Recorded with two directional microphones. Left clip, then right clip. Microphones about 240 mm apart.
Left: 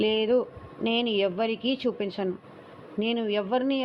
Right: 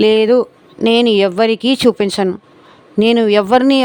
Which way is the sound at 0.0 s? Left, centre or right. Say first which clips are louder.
Right 13 dB; right.